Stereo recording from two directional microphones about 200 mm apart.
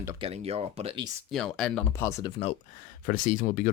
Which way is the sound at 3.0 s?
40° left (ahead or behind).